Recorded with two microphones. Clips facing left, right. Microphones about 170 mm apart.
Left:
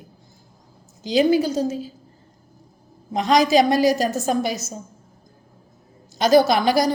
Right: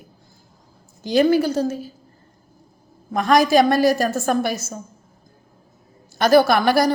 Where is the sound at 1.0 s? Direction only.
55° right (ahead or behind).